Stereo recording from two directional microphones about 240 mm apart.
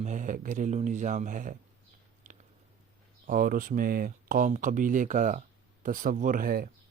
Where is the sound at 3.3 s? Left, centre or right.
Right.